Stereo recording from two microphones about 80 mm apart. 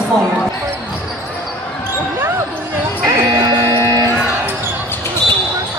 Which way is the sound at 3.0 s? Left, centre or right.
Right.